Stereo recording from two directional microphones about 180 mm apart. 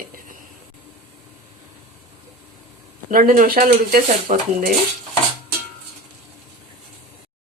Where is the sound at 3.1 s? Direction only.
50° right (ahead or behind).